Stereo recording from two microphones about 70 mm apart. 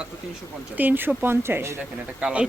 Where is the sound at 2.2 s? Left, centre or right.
Centre.